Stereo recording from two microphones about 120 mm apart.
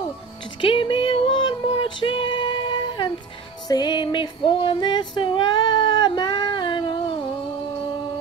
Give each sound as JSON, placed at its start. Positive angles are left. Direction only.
{"t": 0.6, "sound": "music", "side_deg": 45}
{"t": 1.7, "sound": "female singing", "side_deg": 45}